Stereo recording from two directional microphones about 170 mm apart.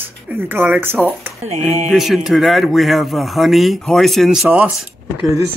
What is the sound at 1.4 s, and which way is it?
Speech, 40° right (ahead or behind).